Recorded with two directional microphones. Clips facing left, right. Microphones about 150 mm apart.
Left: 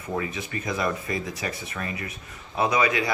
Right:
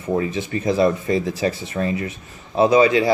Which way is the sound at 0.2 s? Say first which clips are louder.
Right 8 dB; 30° right (ahead or behind).